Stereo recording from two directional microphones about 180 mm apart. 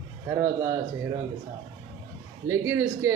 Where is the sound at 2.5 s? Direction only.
15° right (ahead or behind).